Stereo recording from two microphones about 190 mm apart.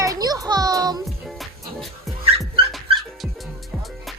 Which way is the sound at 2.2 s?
30° right (ahead or behind).